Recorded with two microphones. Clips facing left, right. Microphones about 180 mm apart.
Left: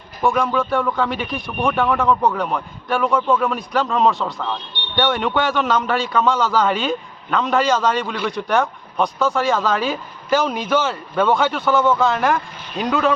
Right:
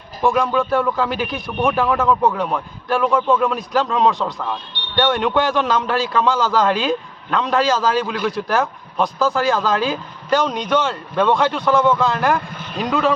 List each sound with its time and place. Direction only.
0.2 s a man's voice: centre (ahead or behind)